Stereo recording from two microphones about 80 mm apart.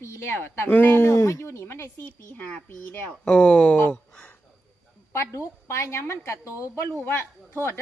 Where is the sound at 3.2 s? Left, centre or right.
Centre.